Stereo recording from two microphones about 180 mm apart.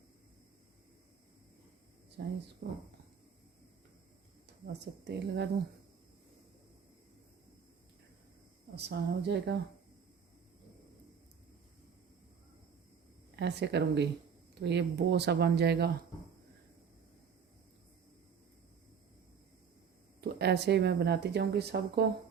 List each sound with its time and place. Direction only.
4.6 s speech: 65° right (ahead or behind)
8.7 s speech: 70° right (ahead or behind)
13.3 s speech: 70° right (ahead or behind)
20.2 s speech: 65° right (ahead or behind)